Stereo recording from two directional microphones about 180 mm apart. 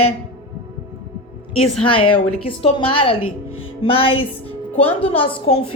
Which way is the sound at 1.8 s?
30° left (ahead or behind).